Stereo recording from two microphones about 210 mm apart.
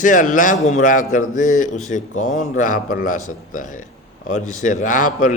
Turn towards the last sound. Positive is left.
turn(degrees=40)  # may be behind; listen again after turning